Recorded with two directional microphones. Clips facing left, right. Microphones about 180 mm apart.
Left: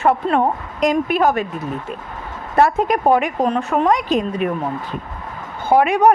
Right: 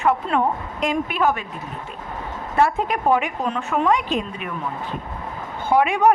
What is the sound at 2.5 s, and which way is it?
A woman's voice, 40° left (ahead or behind).